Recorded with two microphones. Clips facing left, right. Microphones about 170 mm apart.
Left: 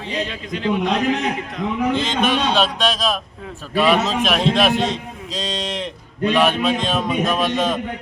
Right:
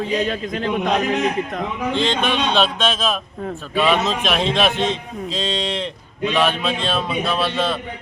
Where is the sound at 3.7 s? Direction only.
10° left (ahead or behind).